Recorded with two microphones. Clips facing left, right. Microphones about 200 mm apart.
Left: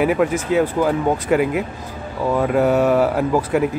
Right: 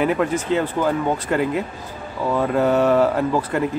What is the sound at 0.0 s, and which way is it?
Speech, 10° left (ahead or behind).